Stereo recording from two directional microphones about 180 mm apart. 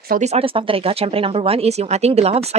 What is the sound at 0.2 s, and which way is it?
Speech, 35° right (ahead or behind).